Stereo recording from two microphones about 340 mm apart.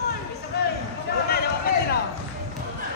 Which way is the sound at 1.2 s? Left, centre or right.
Left.